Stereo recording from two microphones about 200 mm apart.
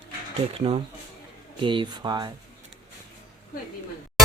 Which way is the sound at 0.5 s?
30° right (ahead or behind).